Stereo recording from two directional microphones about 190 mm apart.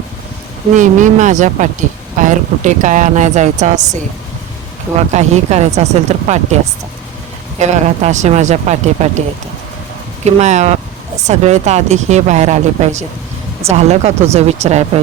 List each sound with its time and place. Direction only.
0.7 s speech: 40° right (ahead or behind)
4.9 s speech: 35° right (ahead or behind)
7.6 s speech: 35° right (ahead or behind)
10.2 s speech: 35° right (ahead or behind)